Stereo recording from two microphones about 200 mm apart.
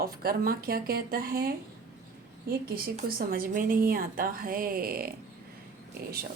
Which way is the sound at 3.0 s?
45° right (ahead or behind).